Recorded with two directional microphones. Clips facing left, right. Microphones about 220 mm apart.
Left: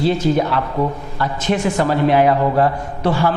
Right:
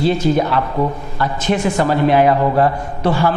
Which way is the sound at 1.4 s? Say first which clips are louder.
Right 1 dB; 10° right (ahead or behind).